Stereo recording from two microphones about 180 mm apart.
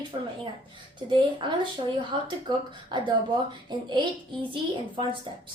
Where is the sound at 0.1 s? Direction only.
30° right (ahead or behind).